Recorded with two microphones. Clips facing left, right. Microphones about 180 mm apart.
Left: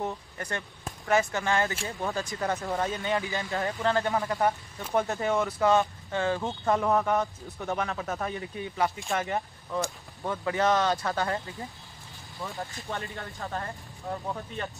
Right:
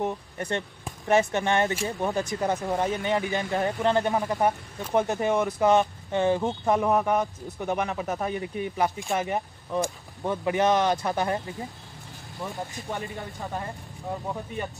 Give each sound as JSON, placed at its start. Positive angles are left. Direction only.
{"t": 0.0, "sound": "speech", "side_deg": -25}
{"t": 13.2, "sound": "speech", "side_deg": -15}